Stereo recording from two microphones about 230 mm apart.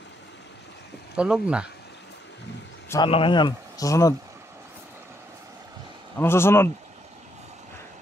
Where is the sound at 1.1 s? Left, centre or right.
Centre.